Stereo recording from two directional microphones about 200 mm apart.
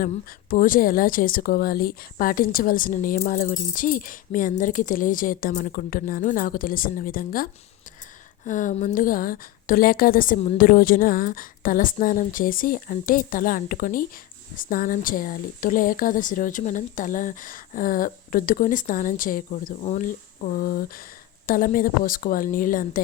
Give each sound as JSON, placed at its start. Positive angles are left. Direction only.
{"t": 0.5, "sound": "a woman's voice", "side_deg": 40}